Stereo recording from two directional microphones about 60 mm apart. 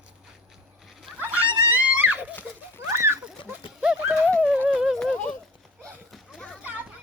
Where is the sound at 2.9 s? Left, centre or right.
Right.